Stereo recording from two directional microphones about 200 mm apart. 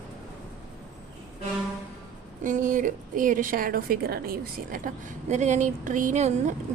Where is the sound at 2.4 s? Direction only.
40° right (ahead or behind).